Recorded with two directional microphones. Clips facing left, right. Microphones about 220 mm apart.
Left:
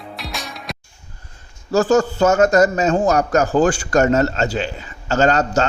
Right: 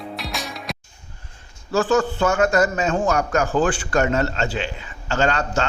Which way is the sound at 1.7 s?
40° left (ahead or behind).